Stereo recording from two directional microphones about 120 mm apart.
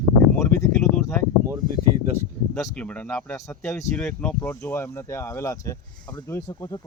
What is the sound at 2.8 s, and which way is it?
Speech, 15° left (ahead or behind).